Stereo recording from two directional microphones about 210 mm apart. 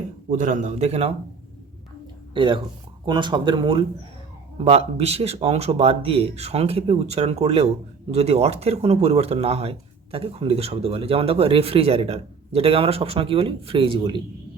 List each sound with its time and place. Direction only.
0.3 s a man's voice: 35° right (ahead or behind)
2.3 s speech: 25° right (ahead or behind)